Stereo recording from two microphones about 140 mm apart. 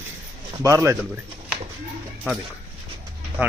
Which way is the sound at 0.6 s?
20° right (ahead or behind).